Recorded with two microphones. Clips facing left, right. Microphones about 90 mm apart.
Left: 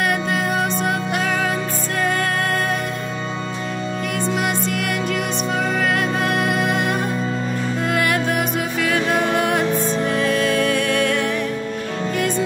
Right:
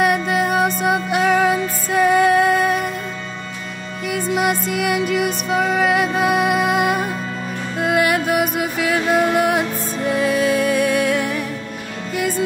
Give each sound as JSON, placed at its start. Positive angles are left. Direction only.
{"t": 0.0, "sound": "music", "side_deg": -5}
{"t": 4.2, "sound": "music", "side_deg": -5}